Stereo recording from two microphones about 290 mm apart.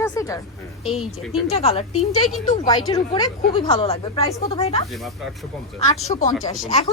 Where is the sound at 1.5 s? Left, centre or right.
Left.